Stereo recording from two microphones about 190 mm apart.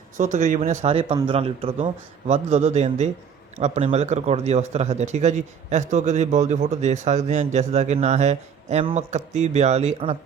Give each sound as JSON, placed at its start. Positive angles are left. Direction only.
{"t": 0.2, "sound": "speech", "side_deg": -35}